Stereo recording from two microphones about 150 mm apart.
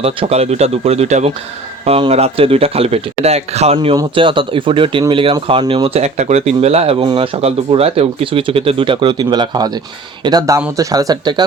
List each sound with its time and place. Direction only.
0.0 s speech: 45° right (ahead or behind)
3.9 s speech: 35° right (ahead or behind)